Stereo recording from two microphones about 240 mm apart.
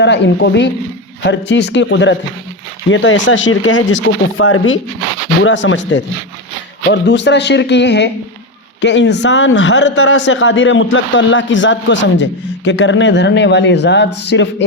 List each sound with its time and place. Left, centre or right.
0.0 s a man's voice: left